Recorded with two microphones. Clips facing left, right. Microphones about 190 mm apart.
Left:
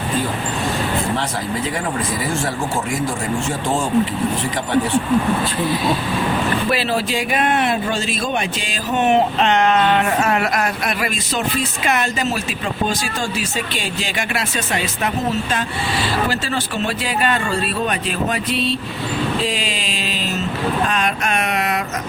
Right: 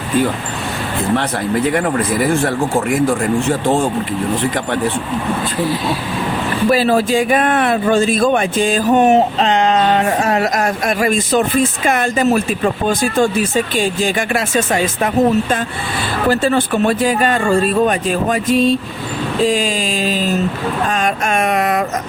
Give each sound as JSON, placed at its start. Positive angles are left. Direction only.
{"t": 2.2, "sound": "speech", "side_deg": -60}
{"t": 6.7, "sound": "a man's voice", "side_deg": -45}